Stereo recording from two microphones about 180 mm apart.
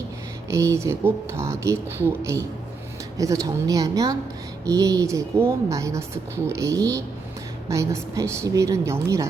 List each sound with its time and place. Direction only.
0.5 s a woman's voice: 15° right (ahead or behind)